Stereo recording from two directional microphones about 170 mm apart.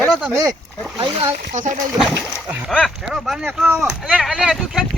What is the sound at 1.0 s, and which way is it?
Speech, 30° right (ahead or behind).